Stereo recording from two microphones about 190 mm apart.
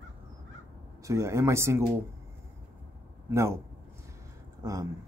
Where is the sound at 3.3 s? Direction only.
15° right (ahead or behind).